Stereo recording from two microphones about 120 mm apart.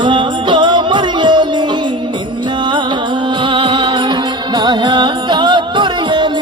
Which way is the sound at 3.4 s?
45° right (ahead or behind).